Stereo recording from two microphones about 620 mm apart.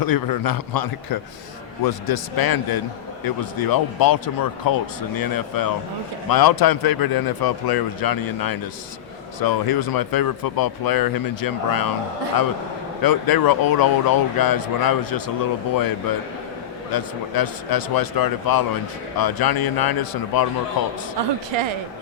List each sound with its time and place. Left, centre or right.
0.0 s speech: left
13.0 s speech: left
21.2 s a woman's voice: right